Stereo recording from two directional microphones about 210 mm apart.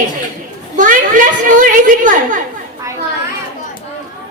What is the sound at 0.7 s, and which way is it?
A woman's voice, 40° right (ahead or behind).